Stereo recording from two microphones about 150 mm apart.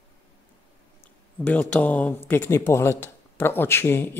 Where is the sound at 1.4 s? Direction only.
10° left (ahead or behind).